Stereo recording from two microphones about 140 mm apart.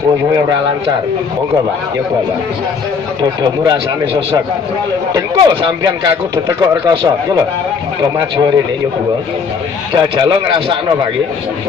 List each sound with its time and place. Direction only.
3.2 s speech: 30° right (ahead or behind)
9.9 s speech: 35° right (ahead or behind)